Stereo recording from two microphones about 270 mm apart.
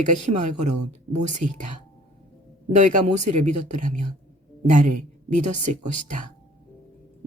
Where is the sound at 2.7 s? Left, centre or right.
Right.